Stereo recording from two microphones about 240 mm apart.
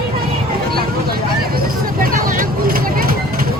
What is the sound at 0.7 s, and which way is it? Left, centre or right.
Vehicle, right.